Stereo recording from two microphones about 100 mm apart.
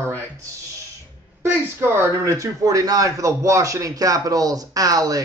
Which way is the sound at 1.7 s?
30° right (ahead or behind).